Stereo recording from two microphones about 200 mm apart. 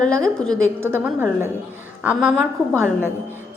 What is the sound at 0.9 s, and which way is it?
Speech, 10° right (ahead or behind).